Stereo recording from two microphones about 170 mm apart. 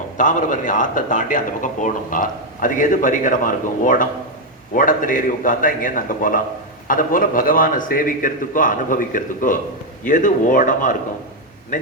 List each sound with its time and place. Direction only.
0.2 s speech: 50° left (ahead or behind)